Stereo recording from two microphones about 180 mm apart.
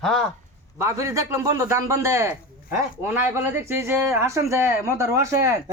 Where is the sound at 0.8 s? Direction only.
15° right (ahead or behind).